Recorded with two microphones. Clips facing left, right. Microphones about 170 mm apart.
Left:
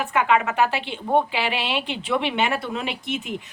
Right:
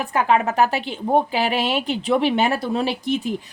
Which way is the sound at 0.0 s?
35° right (ahead or behind).